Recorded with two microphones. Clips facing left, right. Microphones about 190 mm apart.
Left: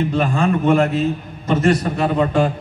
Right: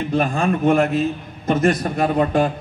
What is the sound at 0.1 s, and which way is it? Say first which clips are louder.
A man's voice: left 1 dB; 50° right (ahead or behind).